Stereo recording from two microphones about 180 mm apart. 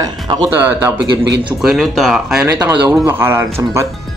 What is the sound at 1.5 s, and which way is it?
Speech, centre (ahead or behind).